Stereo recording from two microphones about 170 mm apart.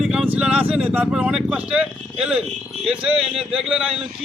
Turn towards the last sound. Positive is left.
turn(degrees=-5)  # may be behind; listen again after turning